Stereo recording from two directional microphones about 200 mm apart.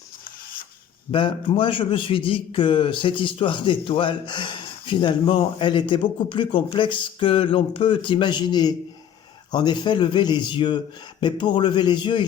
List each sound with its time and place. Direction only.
1.1 s a man's voice: 25° left (ahead or behind)